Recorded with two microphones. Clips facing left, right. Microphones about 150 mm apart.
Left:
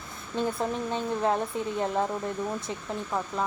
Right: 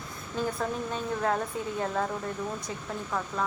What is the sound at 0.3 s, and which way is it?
Speech, 25° left (ahead or behind).